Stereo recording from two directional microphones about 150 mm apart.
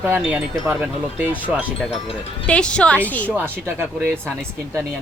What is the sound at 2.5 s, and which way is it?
Speech, 5° left (ahead or behind).